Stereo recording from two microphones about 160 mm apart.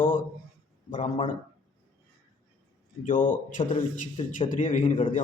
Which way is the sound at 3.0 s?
55° left (ahead or behind).